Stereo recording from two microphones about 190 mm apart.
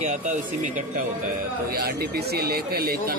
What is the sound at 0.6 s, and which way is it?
Speech, 40° right (ahead or behind).